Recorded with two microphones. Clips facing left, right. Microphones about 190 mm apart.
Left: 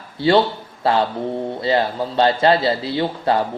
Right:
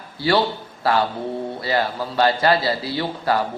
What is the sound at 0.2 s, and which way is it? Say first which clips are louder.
A man's voice: left 4 dB; 25° left (ahead or behind).